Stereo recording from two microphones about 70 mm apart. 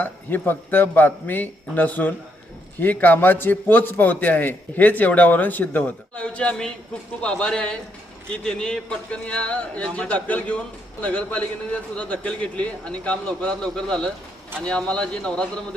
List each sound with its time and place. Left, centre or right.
0.0 s a man's voice: left